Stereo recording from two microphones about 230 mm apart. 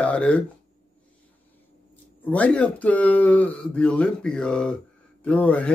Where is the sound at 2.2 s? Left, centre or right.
Centre.